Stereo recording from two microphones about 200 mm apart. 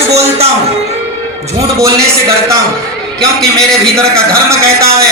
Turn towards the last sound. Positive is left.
turn(degrees=-15)  # may be behind; listen again after turning